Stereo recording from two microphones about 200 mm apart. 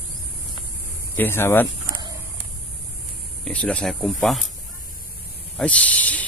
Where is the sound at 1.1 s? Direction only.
10° left (ahead or behind).